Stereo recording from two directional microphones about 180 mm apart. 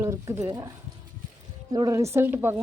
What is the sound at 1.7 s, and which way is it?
Speech, 20° right (ahead or behind).